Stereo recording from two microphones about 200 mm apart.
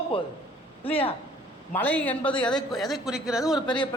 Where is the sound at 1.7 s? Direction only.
10° left (ahead or behind).